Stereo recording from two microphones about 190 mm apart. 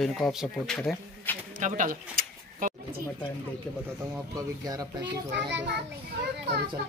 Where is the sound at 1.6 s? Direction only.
45° right (ahead or behind).